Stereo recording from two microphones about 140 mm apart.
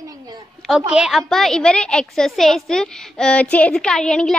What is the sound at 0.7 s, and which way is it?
A woman's voice, 5° right (ahead or behind).